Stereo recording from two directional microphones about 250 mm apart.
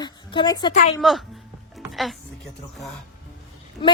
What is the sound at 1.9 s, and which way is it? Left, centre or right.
Music, centre.